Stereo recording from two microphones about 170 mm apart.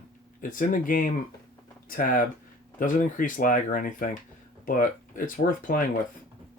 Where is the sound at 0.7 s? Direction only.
50° left (ahead or behind).